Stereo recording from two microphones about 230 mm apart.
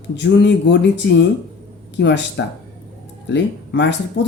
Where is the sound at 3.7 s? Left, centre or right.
Left.